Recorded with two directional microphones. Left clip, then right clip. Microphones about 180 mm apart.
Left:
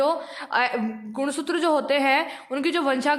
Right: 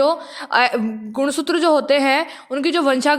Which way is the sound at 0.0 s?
25° right (ahead or behind).